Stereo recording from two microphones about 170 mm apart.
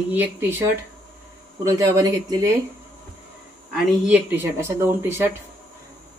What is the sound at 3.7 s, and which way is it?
Speech, 10° right (ahead or behind).